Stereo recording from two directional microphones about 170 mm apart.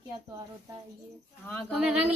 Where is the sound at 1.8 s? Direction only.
10° right (ahead or behind).